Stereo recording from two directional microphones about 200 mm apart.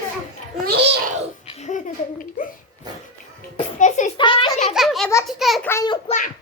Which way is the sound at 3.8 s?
35° left (ahead or behind).